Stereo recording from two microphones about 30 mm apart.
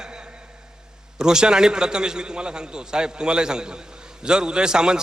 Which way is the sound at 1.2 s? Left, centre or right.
Right.